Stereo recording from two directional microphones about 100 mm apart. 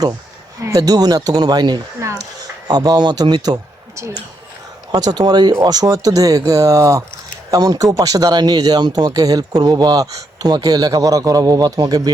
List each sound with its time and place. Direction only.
0.6 s speech: 35° right (ahead or behind)
2.0 s a sound: 30° right (ahead or behind)
2.6 s speech: 40° right (ahead or behind)
4.9 s speech: 40° right (ahead or behind)